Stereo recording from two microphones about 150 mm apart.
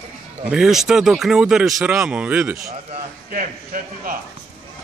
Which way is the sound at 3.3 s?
70° right (ahead or behind).